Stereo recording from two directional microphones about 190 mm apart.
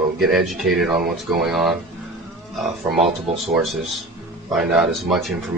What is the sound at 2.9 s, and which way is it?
Speech, centre (ahead or behind).